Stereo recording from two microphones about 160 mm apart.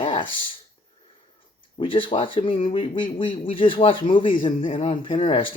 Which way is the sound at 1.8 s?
30° left (ahead or behind).